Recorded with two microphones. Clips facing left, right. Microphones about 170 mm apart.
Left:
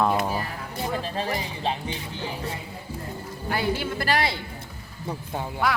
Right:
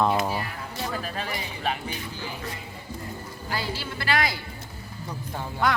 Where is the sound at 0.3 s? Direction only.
25° left (ahead or behind).